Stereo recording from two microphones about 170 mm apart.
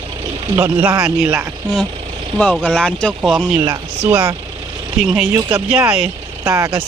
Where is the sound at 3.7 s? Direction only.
10° right (ahead or behind).